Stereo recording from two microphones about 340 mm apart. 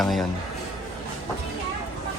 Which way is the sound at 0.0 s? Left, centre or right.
Centre.